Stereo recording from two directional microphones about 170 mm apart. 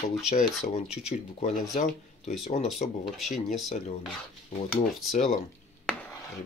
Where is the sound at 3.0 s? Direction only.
Centre (ahead or behind).